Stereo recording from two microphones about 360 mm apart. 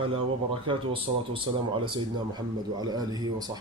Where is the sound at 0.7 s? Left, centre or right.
Centre.